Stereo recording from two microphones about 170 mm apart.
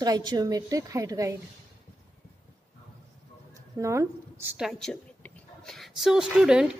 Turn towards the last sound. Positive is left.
turn(degrees=-5)  # may be behind; listen again after turning